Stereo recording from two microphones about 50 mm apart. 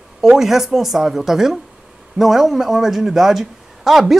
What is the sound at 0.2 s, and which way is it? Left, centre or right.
A woman's voice, centre.